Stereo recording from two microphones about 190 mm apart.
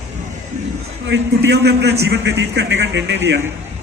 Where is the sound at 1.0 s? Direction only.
65° right (ahead or behind).